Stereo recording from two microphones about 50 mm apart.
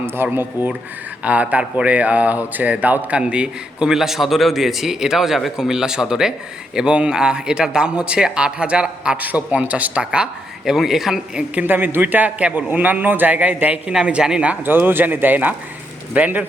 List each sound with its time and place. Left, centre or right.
0.3 s speech: right
1.2 s a man's voice: right
10.7 s a man's voice: centre
11.6 s a man's voice: right; by 14.5 s centre
14.6 s a man's voice: right